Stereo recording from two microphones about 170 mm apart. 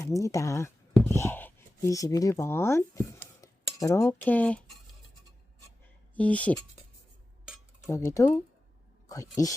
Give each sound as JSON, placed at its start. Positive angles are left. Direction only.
{"t": 0.0, "sound": "speech", "side_deg": 20}
{"t": 6.1, "sound": "speech", "side_deg": 10}
{"t": 7.9, "sound": "speech", "side_deg": 15}